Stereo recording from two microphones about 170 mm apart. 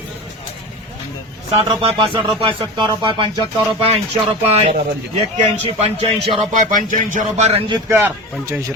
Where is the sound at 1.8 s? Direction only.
30° right (ahead or behind).